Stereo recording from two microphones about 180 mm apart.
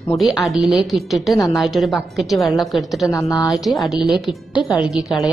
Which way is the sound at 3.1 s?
15° left (ahead or behind).